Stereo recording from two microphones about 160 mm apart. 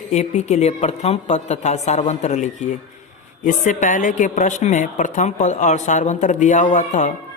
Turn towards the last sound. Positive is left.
turn(degrees=50)  # may be behind; listen again after turning